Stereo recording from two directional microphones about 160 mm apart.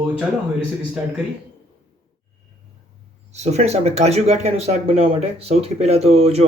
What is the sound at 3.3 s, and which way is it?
Speech, 45° right (ahead or behind).